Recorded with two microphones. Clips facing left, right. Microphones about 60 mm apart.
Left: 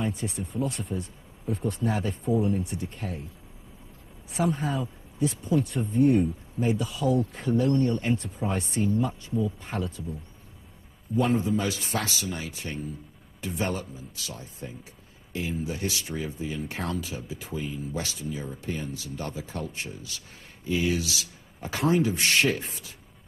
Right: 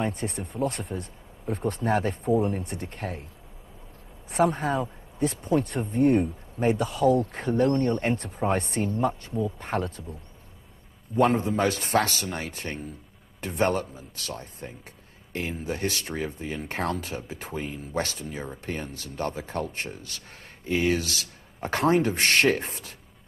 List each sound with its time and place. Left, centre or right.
0.0 s speech: right
4.3 s speech: right
11.1 s speech: right